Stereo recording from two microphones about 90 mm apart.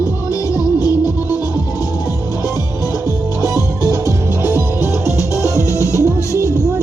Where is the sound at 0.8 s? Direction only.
40° left (ahead or behind).